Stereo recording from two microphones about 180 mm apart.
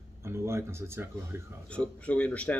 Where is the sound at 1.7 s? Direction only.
5° left (ahead or behind).